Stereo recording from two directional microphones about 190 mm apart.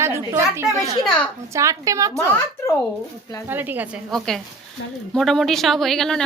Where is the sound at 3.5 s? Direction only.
10° right (ahead or behind).